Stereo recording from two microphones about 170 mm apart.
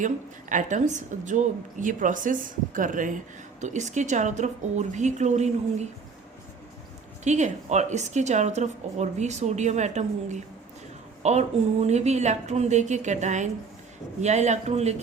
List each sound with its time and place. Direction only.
0.0 s a woman's voice: 50° right (ahead or behind)
7.3 s a woman's voice: 45° right (ahead or behind)